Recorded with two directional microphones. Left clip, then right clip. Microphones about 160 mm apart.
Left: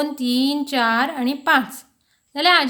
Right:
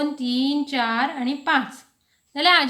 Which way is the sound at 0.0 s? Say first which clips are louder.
Left 3 dB; 40° left (ahead or behind).